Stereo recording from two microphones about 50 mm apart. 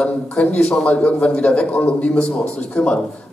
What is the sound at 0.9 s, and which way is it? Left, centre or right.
A man's voice, left.